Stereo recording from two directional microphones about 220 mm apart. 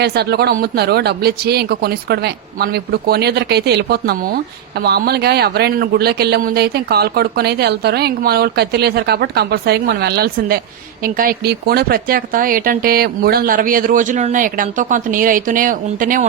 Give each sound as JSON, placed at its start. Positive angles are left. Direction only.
{"t": 0.0, "sound": "speech", "side_deg": -45}